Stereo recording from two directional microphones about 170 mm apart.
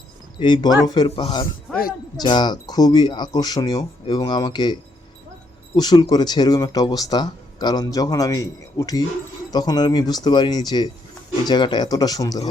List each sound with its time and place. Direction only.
0.3 s speech: 25° left (ahead or behind)